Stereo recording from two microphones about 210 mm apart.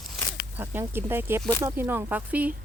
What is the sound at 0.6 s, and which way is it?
Speech, 10° right (ahead or behind).